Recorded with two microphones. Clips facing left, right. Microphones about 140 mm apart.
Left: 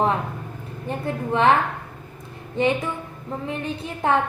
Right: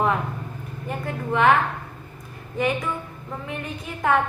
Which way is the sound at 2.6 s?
25° left (ahead or behind).